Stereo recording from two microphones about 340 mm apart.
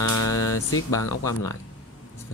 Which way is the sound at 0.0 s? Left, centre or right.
Left.